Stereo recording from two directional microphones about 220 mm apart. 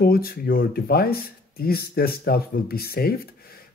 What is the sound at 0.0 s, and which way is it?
Speech, 45° left (ahead or behind).